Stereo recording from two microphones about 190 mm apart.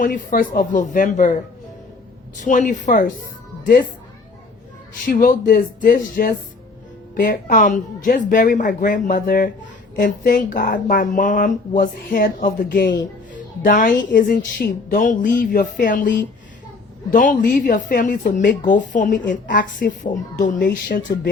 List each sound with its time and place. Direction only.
0.0 s speech: 45° left (ahead or behind)
2.4 s a woman's voice: 40° left (ahead or behind)
5.0 s speech: 45° left (ahead or behind)
13.3 s a sound: 45° left (ahead or behind)
14.1 s speech: 45° left (ahead or behind)
20.6 s speech: 55° left (ahead or behind)